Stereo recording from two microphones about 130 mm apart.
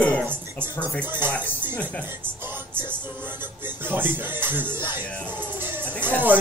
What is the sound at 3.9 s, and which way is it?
Music, 15° right (ahead or behind).